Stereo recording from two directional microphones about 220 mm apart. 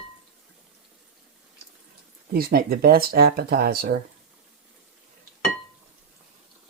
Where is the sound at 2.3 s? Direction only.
40° right (ahead or behind).